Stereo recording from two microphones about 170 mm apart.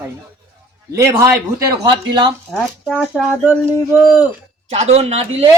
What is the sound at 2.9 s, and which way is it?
Speech, 5° right (ahead or behind).